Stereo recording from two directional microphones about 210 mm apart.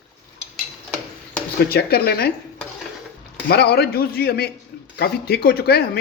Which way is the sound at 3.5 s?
50° left (ahead or behind).